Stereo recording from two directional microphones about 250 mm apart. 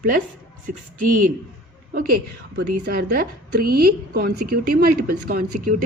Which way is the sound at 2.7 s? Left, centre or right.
Right.